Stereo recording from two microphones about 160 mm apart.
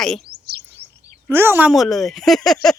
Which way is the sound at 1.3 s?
15° right (ahead or behind).